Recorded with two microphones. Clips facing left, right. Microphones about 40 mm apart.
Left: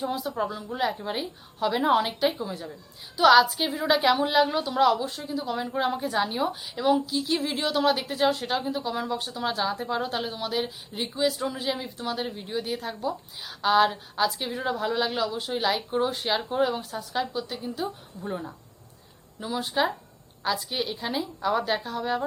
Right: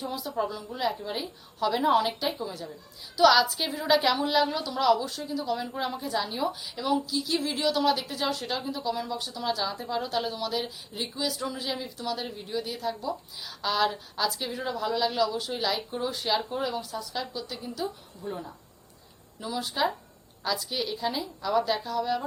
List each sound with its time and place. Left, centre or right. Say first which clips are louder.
0.0 s a woman's voice: left 2 dB; left
19.4 s a woman's voice: left 2 dB; left